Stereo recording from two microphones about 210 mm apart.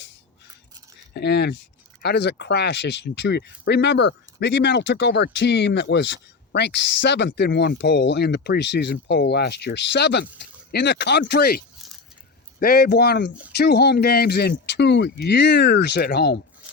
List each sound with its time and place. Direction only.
1.1 s speech: 50° left (ahead or behind)